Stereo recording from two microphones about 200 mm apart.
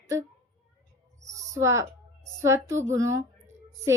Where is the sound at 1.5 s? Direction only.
15° right (ahead or behind).